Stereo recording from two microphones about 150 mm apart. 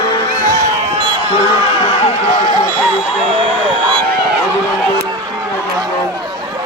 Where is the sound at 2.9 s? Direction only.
35° right (ahead or behind).